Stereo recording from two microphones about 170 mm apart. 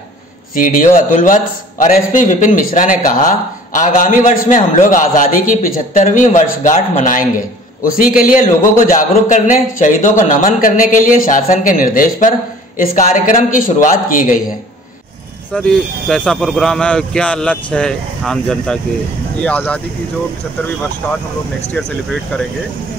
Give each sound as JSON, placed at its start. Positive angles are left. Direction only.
{"t": 0.6, "sound": "a man's voice", "side_deg": 55}
{"t": 15.5, "sound": "speech", "side_deg": 5}
{"t": 21.0, "sound": "speech", "side_deg": 10}